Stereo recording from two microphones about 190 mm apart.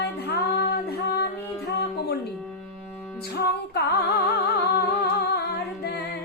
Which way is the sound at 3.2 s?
55° left (ahead or behind).